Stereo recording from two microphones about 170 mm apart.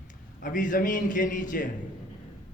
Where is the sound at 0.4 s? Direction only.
50° left (ahead or behind).